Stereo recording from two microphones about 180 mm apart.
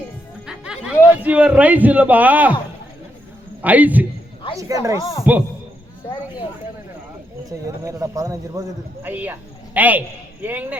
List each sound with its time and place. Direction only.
0.4 s speech: 5° right (ahead or behind)
3.6 s speech: 10° right (ahead or behind)
7.5 s a man's voice: 20° right (ahead or behind)